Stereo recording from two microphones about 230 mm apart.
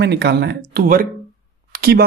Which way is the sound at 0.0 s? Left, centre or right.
Right.